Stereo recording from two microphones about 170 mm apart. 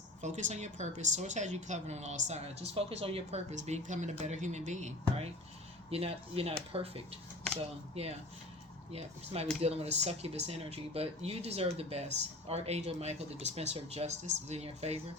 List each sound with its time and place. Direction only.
0.2 s speech: 45° right (ahead or behind)
7.5 s a sound: 5° left (ahead or behind)
8.0 s speech: 40° right (ahead or behind)